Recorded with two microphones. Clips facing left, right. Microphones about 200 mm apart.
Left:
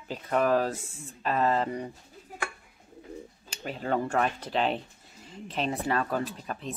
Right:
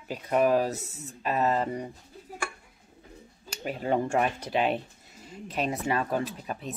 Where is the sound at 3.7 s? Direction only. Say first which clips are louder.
Right 2 dB; 15° right (ahead or behind).